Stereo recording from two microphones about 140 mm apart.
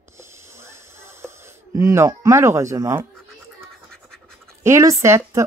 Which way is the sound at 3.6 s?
5° left (ahead or behind).